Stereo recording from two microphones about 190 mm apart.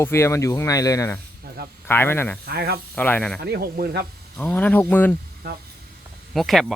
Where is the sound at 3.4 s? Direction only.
55° right (ahead or behind).